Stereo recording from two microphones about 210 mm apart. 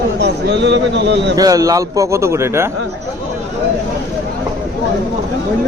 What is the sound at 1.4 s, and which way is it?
A man's voice, 15° right (ahead or behind).